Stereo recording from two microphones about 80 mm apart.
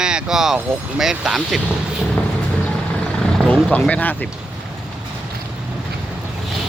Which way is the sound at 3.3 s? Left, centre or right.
Centre.